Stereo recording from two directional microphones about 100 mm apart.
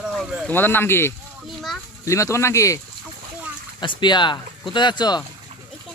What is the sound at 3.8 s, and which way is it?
Speech, 50° left (ahead or behind).